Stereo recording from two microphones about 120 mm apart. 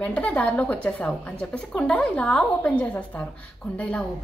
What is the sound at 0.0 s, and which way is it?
A woman's voice, 10° left (ahead or behind).